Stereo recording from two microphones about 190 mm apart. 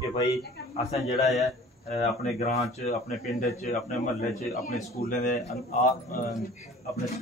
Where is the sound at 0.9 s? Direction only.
35° left (ahead or behind).